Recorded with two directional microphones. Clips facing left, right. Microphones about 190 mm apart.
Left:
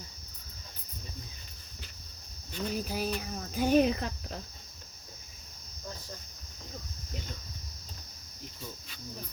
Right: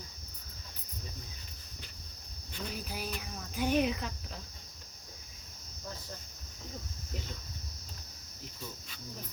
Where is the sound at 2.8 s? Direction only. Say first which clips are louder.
Left 6 dB; 40° left (ahead or behind).